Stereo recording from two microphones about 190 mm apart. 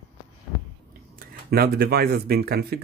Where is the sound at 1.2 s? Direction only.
55° right (ahead or behind).